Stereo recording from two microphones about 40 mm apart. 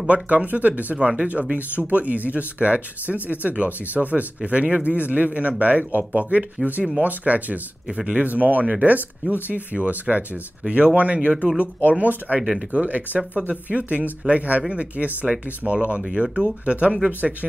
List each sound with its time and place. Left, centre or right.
0.0 s speech: right